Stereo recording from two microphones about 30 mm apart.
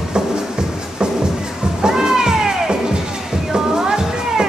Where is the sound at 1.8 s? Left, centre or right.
Right.